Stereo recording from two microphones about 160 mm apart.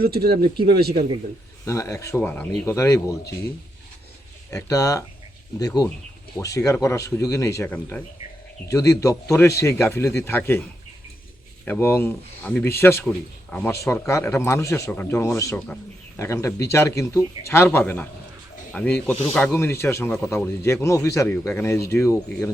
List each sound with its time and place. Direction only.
0.0 s speech: 75° right (ahead or behind)
1.6 s speech: 20° left (ahead or behind)
4.5 s speech: 20° left (ahead or behind)
11.6 s speech: 10° left (ahead or behind)